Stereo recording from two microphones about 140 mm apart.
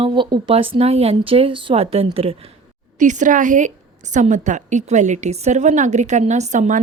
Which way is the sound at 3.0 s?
65° right (ahead or behind).